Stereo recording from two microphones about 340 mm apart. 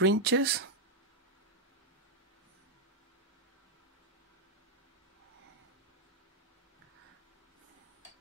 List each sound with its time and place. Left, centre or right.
0.0 s speech: right